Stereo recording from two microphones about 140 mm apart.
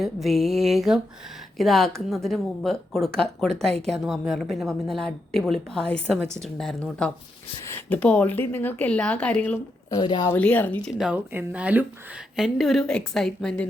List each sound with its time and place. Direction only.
0.0 s a woman's voice: centre (ahead or behind)
7.6 s a sound: 20° left (ahead or behind)
7.9 s speech: 10° left (ahead or behind)
9.9 s speech: 30° left (ahead or behind)
10.3 s speech: 10° left (ahead or behind)
10.9 s speech: 5° right (ahead or behind)
12.4 s a woman's voice: centre (ahead or behind)